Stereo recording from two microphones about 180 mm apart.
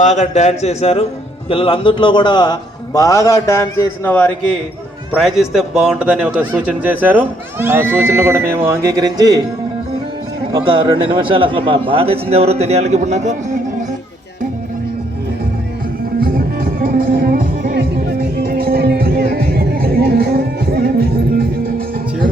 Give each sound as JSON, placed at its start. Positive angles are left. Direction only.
{"t": 0.0, "sound": "a man's voice", "side_deg": 40}
{"t": 10.5, "sound": "a man's voice", "side_deg": -25}
{"t": 16.2, "sound": "music", "side_deg": -55}